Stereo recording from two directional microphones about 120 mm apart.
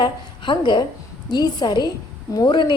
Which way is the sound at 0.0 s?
40° left (ahead or behind).